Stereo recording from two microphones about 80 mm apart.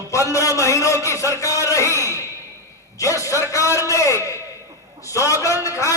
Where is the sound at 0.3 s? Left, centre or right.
Left.